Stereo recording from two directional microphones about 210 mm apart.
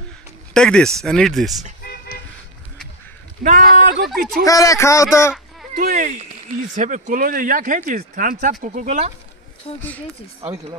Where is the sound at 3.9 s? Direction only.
55° right (ahead or behind).